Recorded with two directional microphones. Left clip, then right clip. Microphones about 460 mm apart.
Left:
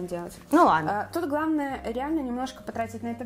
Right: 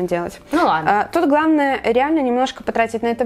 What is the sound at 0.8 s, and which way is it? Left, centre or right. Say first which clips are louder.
A woman's voice: right 12 dB; right.